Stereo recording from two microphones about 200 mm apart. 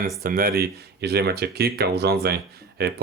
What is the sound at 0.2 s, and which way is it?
Speech, 45° right (ahead or behind).